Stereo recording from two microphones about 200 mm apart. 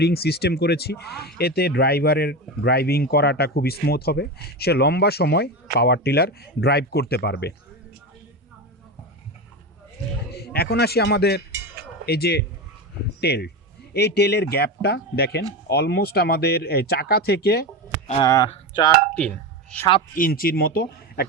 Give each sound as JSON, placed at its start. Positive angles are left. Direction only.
{"t": 0.0, "sound": "speech", "side_deg": 55}
{"t": 10.3, "sound": "a man's voice", "side_deg": 50}
{"t": 19.1, "sound": "speech", "side_deg": 5}
{"t": 20.1, "sound": "speech", "side_deg": 45}